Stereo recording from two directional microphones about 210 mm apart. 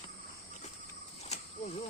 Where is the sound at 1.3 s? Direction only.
30° left (ahead or behind).